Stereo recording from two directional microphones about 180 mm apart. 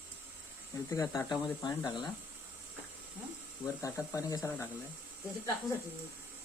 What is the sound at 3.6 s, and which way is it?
Speech, 15° left (ahead or behind).